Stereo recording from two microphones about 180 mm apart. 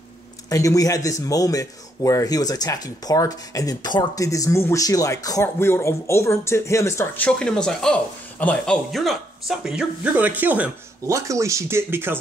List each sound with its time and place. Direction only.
0.5 s a man's voice: 20° left (ahead or behind); by 12.2 s 10° right (ahead or behind)